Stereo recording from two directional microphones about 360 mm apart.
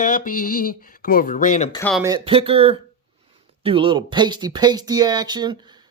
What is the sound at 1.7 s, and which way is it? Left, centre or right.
Speech, centre.